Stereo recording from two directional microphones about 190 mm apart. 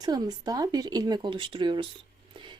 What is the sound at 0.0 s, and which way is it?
Speech, 20° right (ahead or behind).